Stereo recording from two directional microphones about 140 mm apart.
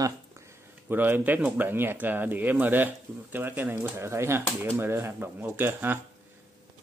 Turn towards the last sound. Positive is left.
turn(degrees=-15)  # may be behind; listen again after turning